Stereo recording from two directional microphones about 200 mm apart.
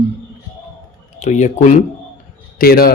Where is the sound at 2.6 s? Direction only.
50° left (ahead or behind).